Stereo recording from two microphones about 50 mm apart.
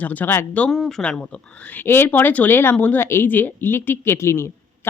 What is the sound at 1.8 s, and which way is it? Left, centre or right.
Speech, left.